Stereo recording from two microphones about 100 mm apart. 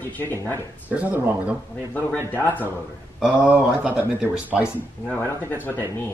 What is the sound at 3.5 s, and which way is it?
Speech, 15° right (ahead or behind).